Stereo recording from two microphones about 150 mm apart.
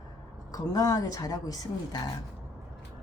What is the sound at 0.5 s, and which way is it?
A woman's voice, 25° left (ahead or behind).